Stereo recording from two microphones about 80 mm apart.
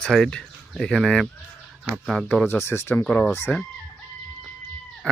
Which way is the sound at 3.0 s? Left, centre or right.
Centre.